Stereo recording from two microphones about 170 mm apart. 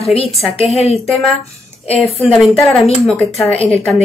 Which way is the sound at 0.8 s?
40° left (ahead or behind).